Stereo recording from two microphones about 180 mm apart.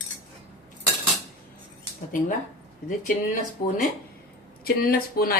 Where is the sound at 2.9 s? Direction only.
50° left (ahead or behind).